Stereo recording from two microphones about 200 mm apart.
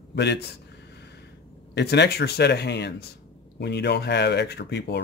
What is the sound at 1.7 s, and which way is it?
Speech, 60° left (ahead or behind).